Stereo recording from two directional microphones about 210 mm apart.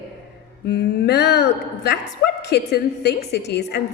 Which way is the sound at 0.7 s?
50° left (ahead or behind).